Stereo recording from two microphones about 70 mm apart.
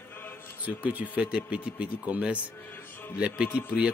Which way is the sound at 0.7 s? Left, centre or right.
Right.